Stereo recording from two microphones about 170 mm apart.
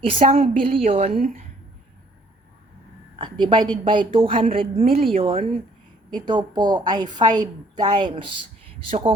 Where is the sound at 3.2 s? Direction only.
30° right (ahead or behind).